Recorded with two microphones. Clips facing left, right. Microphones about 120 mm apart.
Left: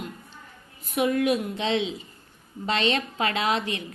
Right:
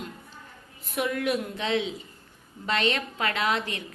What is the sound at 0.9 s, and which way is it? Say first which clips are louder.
A woman's voice: left 4 dB; 20° left (ahead or behind).